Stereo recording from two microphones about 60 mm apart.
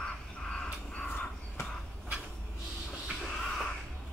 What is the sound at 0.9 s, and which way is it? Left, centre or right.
Crow, centre.